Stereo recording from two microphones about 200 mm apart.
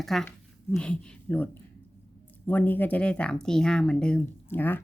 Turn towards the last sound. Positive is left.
turn(degrees=10)  # may be behind; listen again after turning